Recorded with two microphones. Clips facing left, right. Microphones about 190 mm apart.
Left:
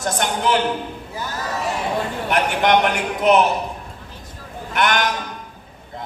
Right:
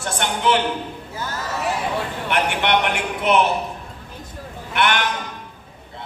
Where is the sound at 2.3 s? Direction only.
40° left (ahead or behind).